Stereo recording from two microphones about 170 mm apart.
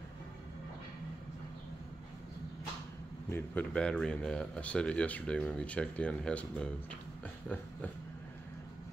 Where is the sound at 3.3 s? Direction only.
5° left (ahead or behind).